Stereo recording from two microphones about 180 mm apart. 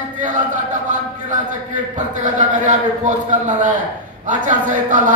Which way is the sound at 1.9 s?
45° right (ahead or behind).